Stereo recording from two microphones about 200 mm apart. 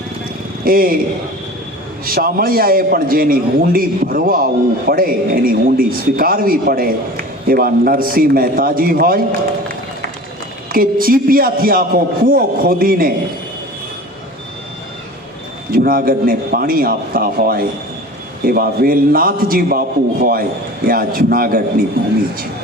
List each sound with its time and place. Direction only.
0.6 s a man's voice: 45° right (ahead or behind)
2.0 s a man's voice: 50° right (ahead or behind)
10.7 s a man's voice: 45° right (ahead or behind)
15.7 s a man's voice: 45° right (ahead or behind)